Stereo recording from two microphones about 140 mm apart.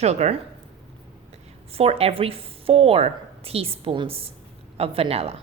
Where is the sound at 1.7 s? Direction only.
45° right (ahead or behind).